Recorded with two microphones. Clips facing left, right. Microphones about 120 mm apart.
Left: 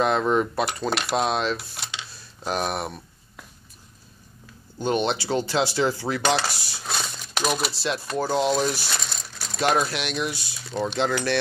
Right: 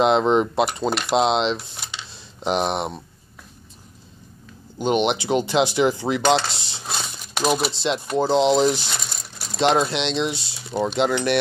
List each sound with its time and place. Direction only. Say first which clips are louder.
0.0 s speech: right 4 dB; 20° right (ahead or behind)
4.7 s speech: right 3 dB; 20° right (ahead or behind)
6.3 s a sound: right 4 dB; 25° right (ahead or behind)
7.7 s speech: right 4 dB; 20° right (ahead or behind)